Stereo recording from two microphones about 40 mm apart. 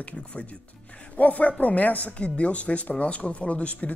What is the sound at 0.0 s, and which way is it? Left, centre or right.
A woman's voice, left.